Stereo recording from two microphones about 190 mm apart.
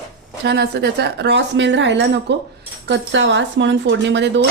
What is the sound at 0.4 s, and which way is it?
Speech, 60° right (ahead or behind).